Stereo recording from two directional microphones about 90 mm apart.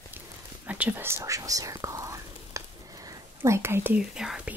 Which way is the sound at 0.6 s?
20° right (ahead or behind).